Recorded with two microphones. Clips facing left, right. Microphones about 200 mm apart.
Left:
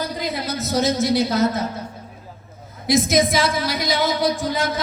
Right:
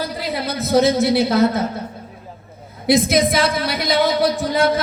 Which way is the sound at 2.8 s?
60° right (ahead or behind).